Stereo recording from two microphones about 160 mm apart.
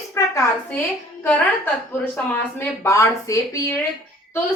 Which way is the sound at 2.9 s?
20° left (ahead or behind).